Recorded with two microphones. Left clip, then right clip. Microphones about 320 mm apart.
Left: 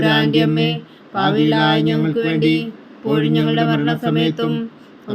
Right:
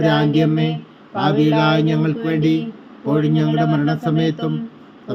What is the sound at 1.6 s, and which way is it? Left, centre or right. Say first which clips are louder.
Speech: left 1 dB; centre.